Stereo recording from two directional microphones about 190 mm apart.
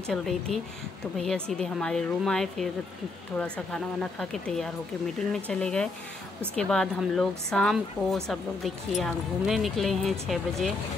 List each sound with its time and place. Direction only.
0.1 s speech: centre (ahead or behind)